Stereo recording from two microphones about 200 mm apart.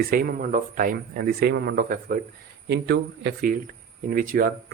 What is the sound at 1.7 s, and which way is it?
Speech, 45° right (ahead or behind).